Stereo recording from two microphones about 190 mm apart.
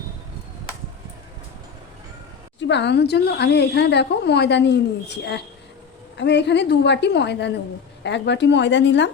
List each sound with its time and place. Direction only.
2.6 s a woman's voice: 65° left (ahead or behind)